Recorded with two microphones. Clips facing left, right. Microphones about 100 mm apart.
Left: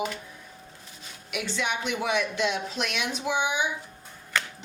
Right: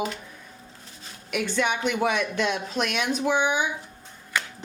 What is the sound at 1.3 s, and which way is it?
A woman's voice, 50° right (ahead or behind).